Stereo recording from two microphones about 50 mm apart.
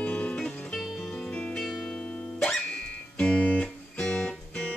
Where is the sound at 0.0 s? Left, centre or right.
Left.